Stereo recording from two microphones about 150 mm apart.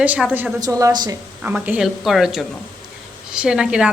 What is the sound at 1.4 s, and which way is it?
A woman's voice, 10° right (ahead or behind).